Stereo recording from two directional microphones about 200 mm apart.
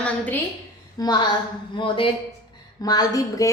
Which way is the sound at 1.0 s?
20° left (ahead or behind).